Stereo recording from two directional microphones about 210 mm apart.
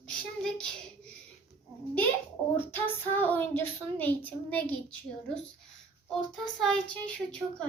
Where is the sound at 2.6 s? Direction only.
10° left (ahead or behind).